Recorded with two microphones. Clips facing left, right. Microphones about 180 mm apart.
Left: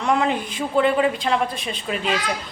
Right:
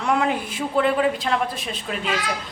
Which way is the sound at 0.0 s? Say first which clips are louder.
Left 1 dB; 5° right (ahead or behind).